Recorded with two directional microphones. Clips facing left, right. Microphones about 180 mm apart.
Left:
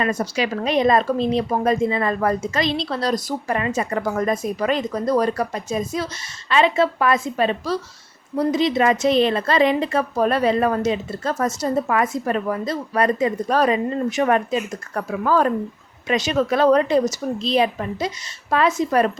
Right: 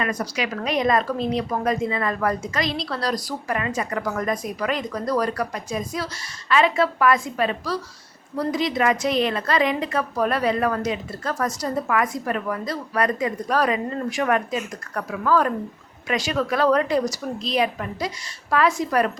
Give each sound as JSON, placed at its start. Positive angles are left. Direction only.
{"t": 0.0, "sound": "a woman's voice", "side_deg": 25}